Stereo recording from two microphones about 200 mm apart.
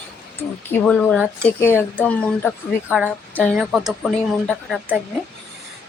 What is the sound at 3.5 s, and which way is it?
Speech, 5° right (ahead or behind).